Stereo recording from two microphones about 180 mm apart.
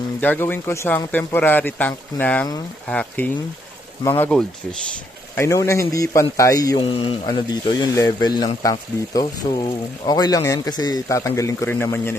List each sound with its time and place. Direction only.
0.2 s speech: 10° left (ahead or behind)
5.3 s speech: 15° left (ahead or behind)